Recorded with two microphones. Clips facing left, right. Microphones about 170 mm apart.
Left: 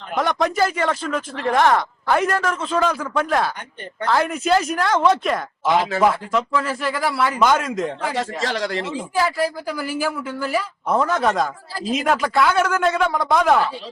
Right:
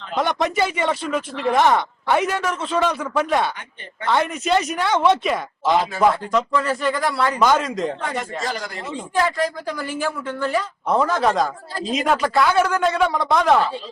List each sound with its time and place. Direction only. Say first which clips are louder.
0.2 s a woman's voice: left 1 dB; centre (ahead or behind)
8.1 s speech: left 2 dB; 90° left
8.9 s a woman's voice: even; 5° left (ahead or behind)